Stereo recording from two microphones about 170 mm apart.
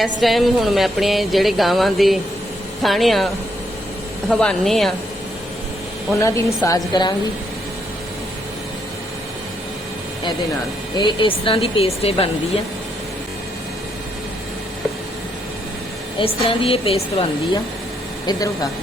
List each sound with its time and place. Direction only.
0.0 s speech: centre (ahead or behind)
4.3 s speech: 5° left (ahead or behind)
6.1 s a woman's voice: 15° left (ahead or behind)
10.9 s a woman's voice: 30° left (ahead or behind)
16.1 s a woman's voice: 30° left (ahead or behind)
18.3 s a woman's voice: 20° left (ahead or behind)